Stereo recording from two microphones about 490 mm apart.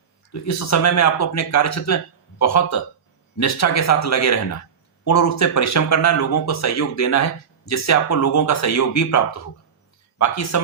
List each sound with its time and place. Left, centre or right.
0.3 s speech: left